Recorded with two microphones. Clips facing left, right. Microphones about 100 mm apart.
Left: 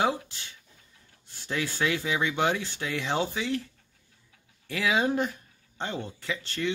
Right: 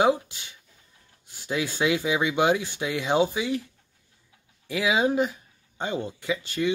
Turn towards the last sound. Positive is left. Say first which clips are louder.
# right 5 dB
turn(degrees=-10)  # may be behind; listen again after turning